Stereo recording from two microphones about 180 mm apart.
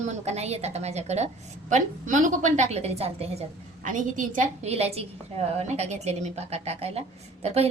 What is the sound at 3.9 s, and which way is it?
A woman's voice, 45° right (ahead or behind).